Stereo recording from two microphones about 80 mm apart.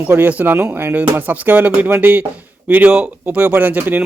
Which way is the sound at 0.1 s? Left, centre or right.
Right.